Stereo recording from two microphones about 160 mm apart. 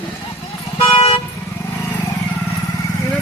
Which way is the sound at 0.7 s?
35° left (ahead or behind).